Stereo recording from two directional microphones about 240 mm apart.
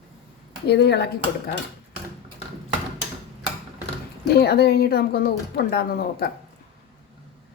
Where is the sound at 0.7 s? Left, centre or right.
Left.